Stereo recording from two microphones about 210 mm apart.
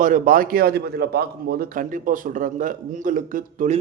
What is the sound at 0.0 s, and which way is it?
A man's voice, 40° right (ahead or behind).